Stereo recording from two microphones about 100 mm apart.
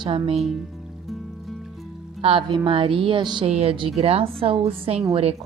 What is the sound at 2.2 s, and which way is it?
Speech, 75° right (ahead or behind).